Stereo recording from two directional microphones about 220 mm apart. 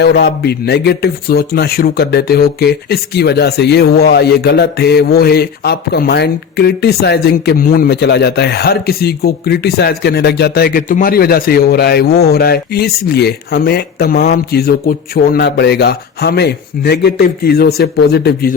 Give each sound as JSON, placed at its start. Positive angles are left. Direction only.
{"t": 0.0, "sound": "speech", "side_deg": 50}